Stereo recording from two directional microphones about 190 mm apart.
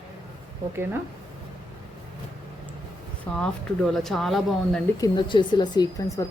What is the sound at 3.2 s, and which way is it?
Speech, 5° left (ahead or behind).